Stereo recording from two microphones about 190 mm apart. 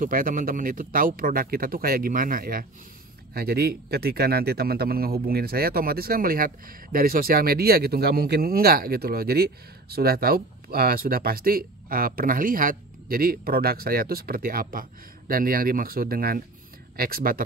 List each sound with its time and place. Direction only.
0.0 s speech: 45° right (ahead or behind)